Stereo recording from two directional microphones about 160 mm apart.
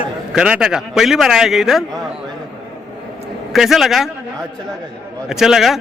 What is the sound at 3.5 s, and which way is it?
Speech, centre (ahead or behind).